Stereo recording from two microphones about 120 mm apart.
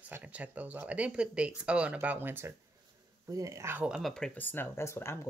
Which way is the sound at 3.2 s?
30° right (ahead or behind).